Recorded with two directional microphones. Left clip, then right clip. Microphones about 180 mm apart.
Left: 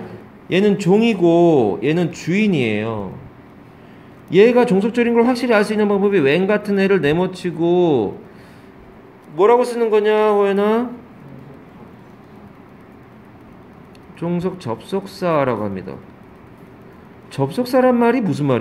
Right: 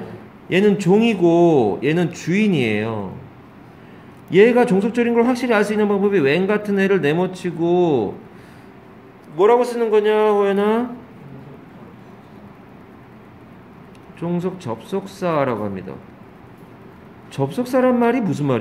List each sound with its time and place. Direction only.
0.5 s a man's voice: 10° left (ahead or behind)
4.3 s a man's voice: 10° left (ahead or behind)
9.4 s a man's voice: 15° left (ahead or behind)
14.2 s a man's voice: 15° left (ahead or behind)
17.3 s a man's voice: 15° left (ahead or behind)